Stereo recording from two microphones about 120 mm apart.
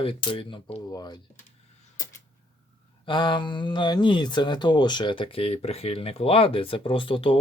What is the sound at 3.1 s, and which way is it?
Speech, 40° left (ahead or behind).